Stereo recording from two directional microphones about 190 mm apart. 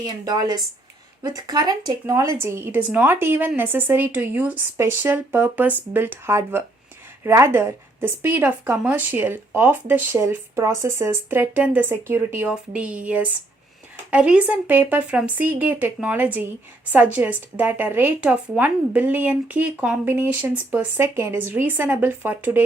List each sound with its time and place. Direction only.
0.0 s speech: 20° right (ahead or behind)